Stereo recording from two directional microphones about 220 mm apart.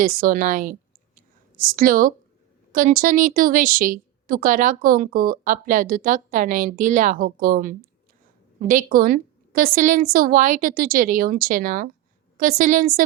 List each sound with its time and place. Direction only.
0.0 s a woman's voice: 40° right (ahead or behind)